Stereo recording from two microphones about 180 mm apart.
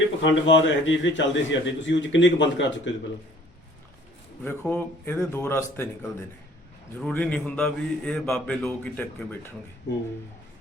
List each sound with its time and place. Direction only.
0.2 s a man's voice: 90° left
4.4 s speech: 10° left (ahead or behind)